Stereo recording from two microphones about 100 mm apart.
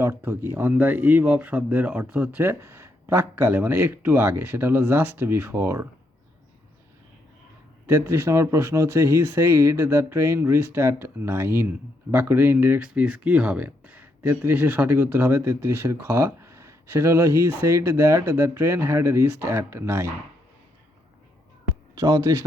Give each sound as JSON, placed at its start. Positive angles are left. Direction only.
{"t": 0.0, "sound": "speech", "side_deg": -20}
{"t": 7.9, "sound": "speech", "side_deg": -25}
{"t": 12.9, "sound": "speech", "side_deg": -10}
{"t": 21.9, "sound": "speech", "side_deg": -40}